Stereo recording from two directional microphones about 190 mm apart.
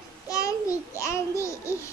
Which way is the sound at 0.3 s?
15° left (ahead or behind).